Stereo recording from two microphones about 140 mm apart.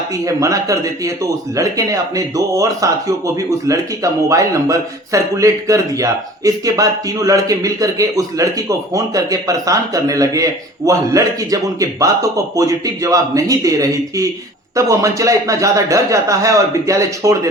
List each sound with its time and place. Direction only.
0.3 s speech: 25° right (ahead or behind)
12.5 s speech: 25° right (ahead or behind)